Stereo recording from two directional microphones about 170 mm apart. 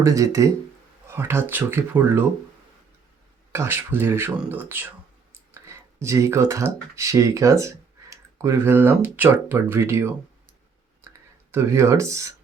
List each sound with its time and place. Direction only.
0.0 s speech: 20° right (ahead or behind)
3.5 s speech: 15° right (ahead or behind)
11.5 s speech: 15° right (ahead or behind)